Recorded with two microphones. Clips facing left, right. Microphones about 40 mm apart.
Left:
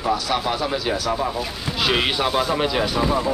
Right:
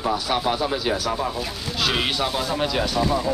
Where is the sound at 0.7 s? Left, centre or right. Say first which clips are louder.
Even; centre.